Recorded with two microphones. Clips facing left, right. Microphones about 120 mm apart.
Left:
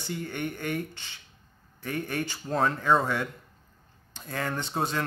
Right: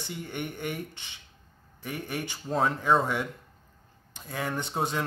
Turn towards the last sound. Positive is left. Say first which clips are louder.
# even
turn(degrees=-15)  # may be behind; listen again after turning